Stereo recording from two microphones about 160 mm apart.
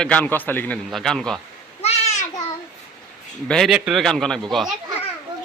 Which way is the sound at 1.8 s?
40° left (ahead or behind).